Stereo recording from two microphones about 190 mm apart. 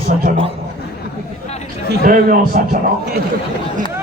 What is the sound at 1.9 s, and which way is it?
Speech, 50° right (ahead or behind).